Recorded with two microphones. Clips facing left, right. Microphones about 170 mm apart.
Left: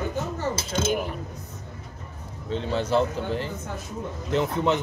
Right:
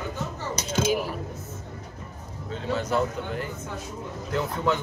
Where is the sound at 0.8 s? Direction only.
5° right (ahead or behind).